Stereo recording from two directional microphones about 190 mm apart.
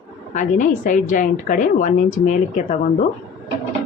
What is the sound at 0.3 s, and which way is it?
A woman's voice, 45° left (ahead or behind).